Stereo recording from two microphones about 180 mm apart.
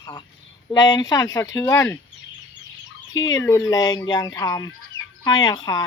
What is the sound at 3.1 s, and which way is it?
Speech, 20° left (ahead or behind).